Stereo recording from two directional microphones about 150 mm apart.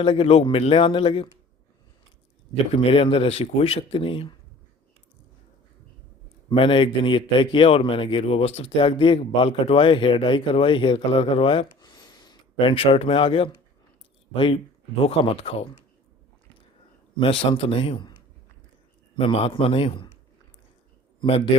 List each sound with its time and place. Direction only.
0.0 s a man's voice: 35° left (ahead or behind)
2.7 s a man's voice: 35° left (ahead or behind)
6.5 s a man's voice: 35° left (ahead or behind)
17.2 s a man's voice: 35° left (ahead or behind)
19.1 s a man's voice: 40° left (ahead or behind)
21.2 s a man's voice: 35° left (ahead or behind)